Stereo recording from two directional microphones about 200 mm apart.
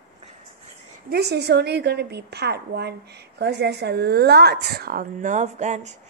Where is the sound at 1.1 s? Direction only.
55° right (ahead or behind).